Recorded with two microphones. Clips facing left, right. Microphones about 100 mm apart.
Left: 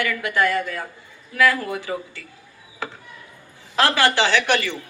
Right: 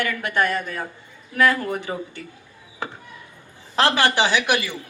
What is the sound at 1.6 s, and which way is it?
Speech, 35° right (ahead or behind).